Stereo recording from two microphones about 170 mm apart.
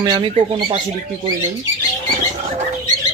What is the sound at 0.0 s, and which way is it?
Speech, 25° right (ahead or behind).